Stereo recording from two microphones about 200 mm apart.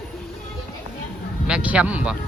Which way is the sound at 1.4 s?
5° right (ahead or behind).